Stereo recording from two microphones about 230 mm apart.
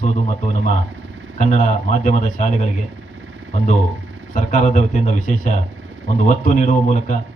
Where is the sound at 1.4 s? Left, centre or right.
Left.